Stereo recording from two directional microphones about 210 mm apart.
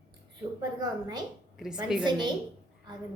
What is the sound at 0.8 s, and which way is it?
Speech, 20° right (ahead or behind).